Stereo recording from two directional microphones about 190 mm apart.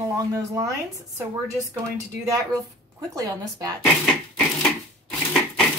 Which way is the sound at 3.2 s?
20° right (ahead or behind).